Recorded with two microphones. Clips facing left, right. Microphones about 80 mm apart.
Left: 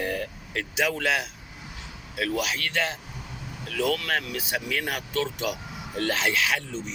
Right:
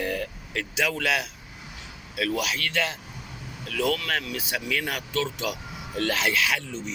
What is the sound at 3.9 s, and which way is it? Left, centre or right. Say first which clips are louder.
Speech: left 1 dB; left.